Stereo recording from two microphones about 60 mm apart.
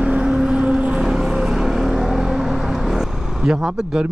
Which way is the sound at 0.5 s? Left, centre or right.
Centre.